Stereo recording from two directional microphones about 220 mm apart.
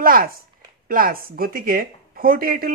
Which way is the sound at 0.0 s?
40° right (ahead or behind).